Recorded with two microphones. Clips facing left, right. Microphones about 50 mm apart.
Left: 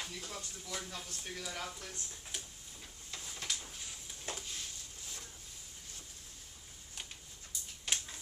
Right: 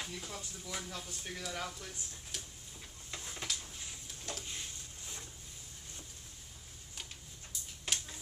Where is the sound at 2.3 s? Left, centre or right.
Centre.